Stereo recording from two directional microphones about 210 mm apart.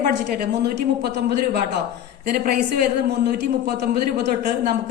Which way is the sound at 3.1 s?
50° right (ahead or behind).